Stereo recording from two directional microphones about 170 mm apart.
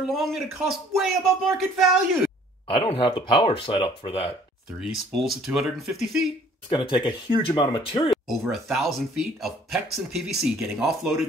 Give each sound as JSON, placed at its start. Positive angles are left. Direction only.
{"t": 0.1, "sound": "speech", "side_deg": 0}
{"t": 2.7, "sound": "speech", "side_deg": 30}
{"t": 4.7, "sound": "speech", "side_deg": 0}
{"t": 6.7, "sound": "speech", "side_deg": 30}
{"t": 8.1, "sound": "speech", "side_deg": 0}